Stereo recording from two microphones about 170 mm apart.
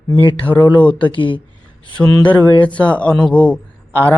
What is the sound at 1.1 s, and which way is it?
Speech, 30° left (ahead or behind).